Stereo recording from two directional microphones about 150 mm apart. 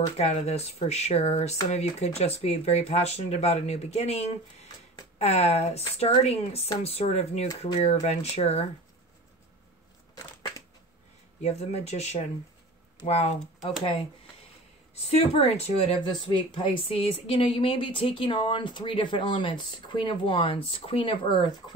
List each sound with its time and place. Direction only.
0.2 s speech: 45° left (ahead or behind)
10.1 s crushing: 25° left (ahead or behind)
11.4 s speech: 45° left (ahead or behind)
15.0 s speech: 45° left (ahead or behind)